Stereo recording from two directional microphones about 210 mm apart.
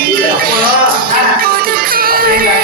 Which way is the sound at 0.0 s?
45° right (ahead or behind).